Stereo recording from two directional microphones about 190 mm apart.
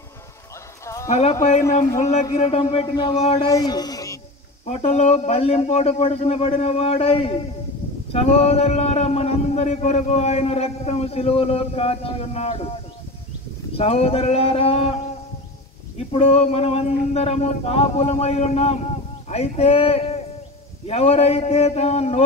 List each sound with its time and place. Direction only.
1.0 s speech: 40° left (ahead or behind)
3.4 s a man's voice: 20° left (ahead or behind)
4.6 s speech: 35° left (ahead or behind)
13.7 s speech: 30° left (ahead or behind)
16.1 s speech: 30° left (ahead or behind)